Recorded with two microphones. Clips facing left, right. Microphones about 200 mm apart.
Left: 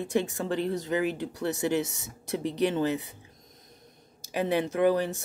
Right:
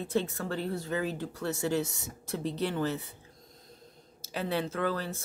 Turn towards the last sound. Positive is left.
turn(degrees=15)  # may be behind; listen again after turning